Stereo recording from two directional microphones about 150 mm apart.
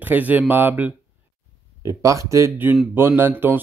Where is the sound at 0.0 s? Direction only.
10° right (ahead or behind).